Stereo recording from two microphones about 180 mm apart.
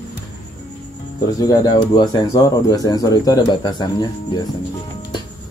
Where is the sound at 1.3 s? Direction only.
20° left (ahead or behind).